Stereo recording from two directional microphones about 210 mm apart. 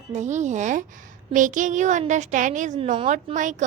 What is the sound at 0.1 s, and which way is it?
A woman's voice, 35° right (ahead or behind).